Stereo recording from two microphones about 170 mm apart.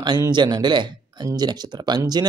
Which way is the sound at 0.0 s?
25° right (ahead or behind).